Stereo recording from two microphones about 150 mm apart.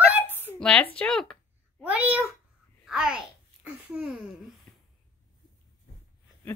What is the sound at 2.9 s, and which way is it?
Babbling, 5° right (ahead or behind).